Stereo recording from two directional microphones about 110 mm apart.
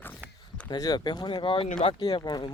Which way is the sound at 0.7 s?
40° left (ahead or behind).